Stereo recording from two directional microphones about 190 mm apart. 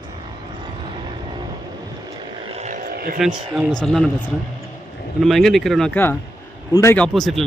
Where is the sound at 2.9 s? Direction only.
50° right (ahead or behind).